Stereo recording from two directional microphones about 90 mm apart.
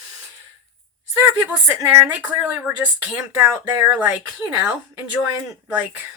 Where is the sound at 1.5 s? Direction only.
20° right (ahead or behind).